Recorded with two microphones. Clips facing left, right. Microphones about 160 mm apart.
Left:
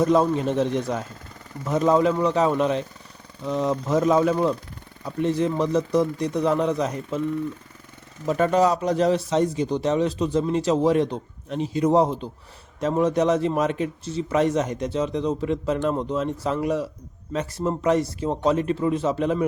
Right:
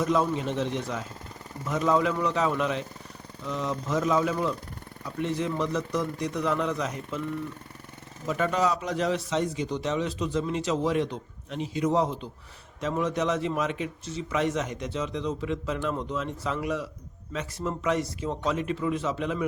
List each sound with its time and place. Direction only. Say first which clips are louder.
0.0 s a man's voice: left 6 dB; 40° left (ahead or behind)
8.3 s a man's voice: left 6 dB; 40° left (ahead or behind)